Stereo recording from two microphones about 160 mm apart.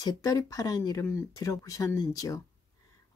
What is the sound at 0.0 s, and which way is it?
Speech, 20° left (ahead or behind).